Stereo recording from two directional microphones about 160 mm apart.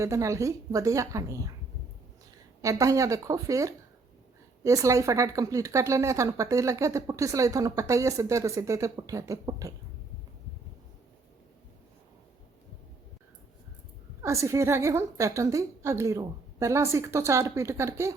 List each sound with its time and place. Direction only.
0.0 s speech: 20° right (ahead or behind)
2.6 s speech: 20° right (ahead or behind)
14.2 s a woman's voice: 20° right (ahead or behind)